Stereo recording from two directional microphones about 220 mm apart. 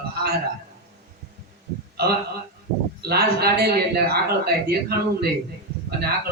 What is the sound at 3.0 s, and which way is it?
A man's voice, 45° right (ahead or behind).